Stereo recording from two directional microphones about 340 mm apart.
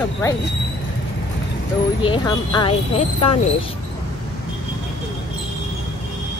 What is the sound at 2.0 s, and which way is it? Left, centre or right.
Speech, centre.